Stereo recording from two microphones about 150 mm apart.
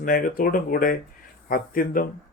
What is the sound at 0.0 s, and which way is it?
Speech, 70° left (ahead or behind).